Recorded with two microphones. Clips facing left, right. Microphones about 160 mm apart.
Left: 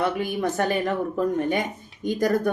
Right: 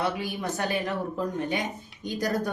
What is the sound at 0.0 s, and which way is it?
Speech, 55° left (ahead or behind).